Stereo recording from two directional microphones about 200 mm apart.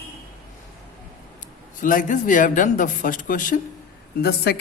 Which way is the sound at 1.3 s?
45° left (ahead or behind).